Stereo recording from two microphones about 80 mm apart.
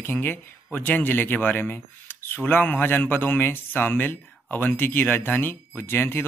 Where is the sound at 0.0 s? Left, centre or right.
Left.